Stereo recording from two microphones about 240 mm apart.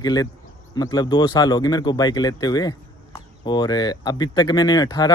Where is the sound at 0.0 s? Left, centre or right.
Centre.